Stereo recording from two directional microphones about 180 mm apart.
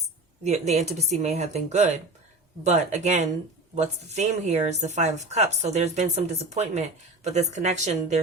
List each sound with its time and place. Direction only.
0.4 s a woman's voice: 40° right (ahead or behind)